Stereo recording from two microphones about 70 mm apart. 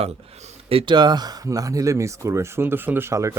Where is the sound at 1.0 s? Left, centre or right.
Right.